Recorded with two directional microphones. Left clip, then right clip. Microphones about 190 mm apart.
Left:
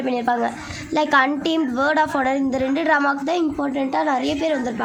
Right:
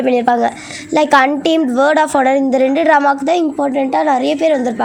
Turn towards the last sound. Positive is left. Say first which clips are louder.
# right 8 dB
turn(degrees=-35)  # may be behind; listen again after turning